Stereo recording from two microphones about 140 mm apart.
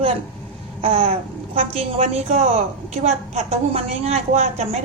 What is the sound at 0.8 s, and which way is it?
A woman's voice, 45° right (ahead or behind).